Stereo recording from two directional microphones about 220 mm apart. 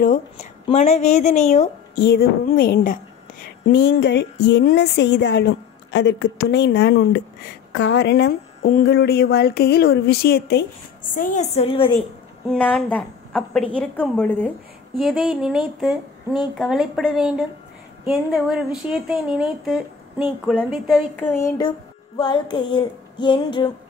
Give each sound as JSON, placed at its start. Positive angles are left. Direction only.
{"t": 0.0, "sound": "a woman's voice", "side_deg": 35}
{"t": 3.7, "sound": "a woman's voice", "side_deg": 50}
{"t": 11.1, "sound": "music", "side_deg": 35}
{"t": 12.4, "sound": "speech", "side_deg": 5}
{"t": 21.3, "sound": "music", "side_deg": 15}